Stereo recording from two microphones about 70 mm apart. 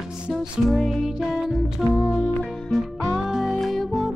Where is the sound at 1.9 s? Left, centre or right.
Left.